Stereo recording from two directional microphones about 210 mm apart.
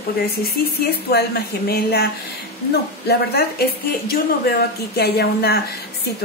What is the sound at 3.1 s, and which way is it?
A woman's voice, 50° left (ahead or behind).